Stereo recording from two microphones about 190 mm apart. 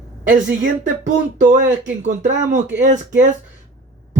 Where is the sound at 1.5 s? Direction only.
40° right (ahead or behind).